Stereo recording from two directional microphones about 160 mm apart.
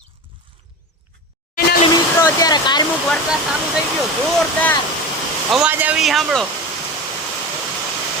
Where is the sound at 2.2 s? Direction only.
25° left (ahead or behind).